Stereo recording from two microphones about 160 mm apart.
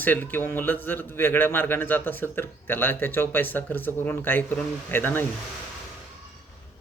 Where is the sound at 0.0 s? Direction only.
10° left (ahead or behind).